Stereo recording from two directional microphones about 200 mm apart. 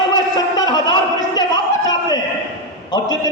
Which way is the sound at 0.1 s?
20° left (ahead or behind).